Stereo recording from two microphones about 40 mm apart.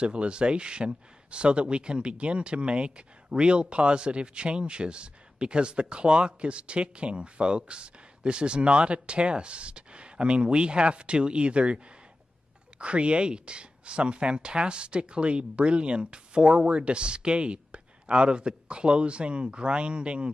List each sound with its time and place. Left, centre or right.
0.0 s speech: right